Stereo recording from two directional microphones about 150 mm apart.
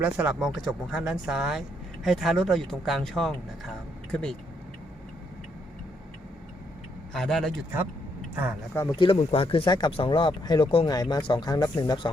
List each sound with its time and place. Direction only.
0.0 s speech: 10° right (ahead or behind)
7.1 s speech: 5° left (ahead or behind)
8.7 s speech: 20° left (ahead or behind)
9.0 s speech: 40° left (ahead or behind)